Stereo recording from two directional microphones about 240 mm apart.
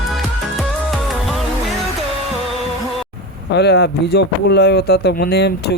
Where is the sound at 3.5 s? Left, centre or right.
Left.